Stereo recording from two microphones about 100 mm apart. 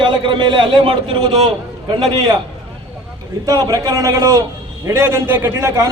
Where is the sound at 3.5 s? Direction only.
40° right (ahead or behind).